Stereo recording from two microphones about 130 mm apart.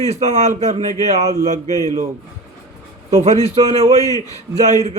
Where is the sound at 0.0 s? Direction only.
60° right (ahead or behind).